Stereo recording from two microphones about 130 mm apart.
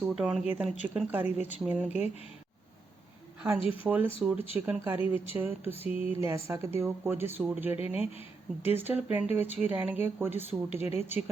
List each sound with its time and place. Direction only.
0.0 s speech: 5° right (ahead or behind)
3.7 s speech: 10° right (ahead or behind)
10.7 s speech: 55° left (ahead or behind)